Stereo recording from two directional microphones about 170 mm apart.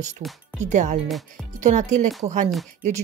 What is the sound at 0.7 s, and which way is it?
Speech, 45° right (ahead or behind).